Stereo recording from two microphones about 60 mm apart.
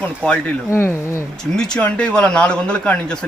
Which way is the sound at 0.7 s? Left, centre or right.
Left.